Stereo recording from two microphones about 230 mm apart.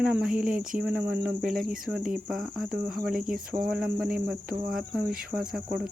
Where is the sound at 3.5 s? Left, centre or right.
Centre.